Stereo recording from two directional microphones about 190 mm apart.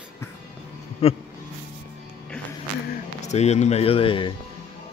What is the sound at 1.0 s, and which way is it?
Speech, 30° left (ahead or behind).